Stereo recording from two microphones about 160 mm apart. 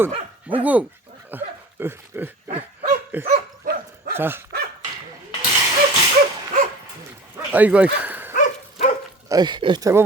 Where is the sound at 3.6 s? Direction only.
65° right (ahead or behind).